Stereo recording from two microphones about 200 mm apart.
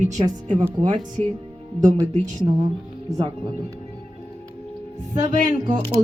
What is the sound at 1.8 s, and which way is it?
Speech, 20° right (ahead or behind).